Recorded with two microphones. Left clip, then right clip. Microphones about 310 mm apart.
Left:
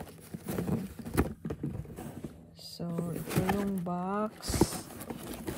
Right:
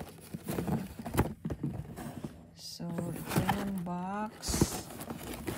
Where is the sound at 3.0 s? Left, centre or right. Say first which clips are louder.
Left 1 dB; centre.